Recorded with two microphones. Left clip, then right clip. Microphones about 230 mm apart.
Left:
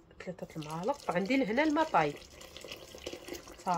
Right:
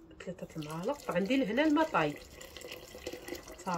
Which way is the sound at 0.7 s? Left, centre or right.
Left.